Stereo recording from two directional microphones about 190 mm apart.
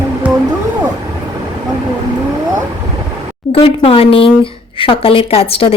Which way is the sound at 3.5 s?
30° left (ahead or behind).